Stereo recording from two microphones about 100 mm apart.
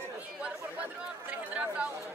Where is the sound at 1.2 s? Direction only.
15° right (ahead or behind).